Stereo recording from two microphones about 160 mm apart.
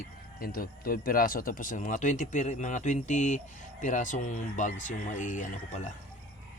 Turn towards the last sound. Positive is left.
turn(degrees=50)  # may be behind; listen again after turning